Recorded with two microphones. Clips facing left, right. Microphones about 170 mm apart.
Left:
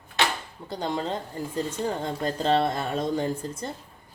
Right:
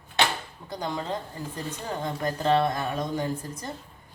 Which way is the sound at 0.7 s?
30° left (ahead or behind).